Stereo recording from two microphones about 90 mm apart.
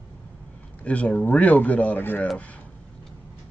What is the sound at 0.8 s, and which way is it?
A man's voice, 15° left (ahead or behind).